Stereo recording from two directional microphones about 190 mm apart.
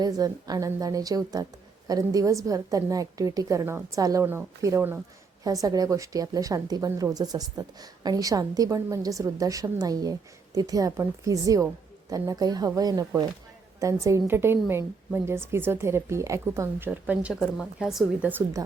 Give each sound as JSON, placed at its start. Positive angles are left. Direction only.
{"t": 0.0, "sound": "a woman's voice", "side_deg": -20}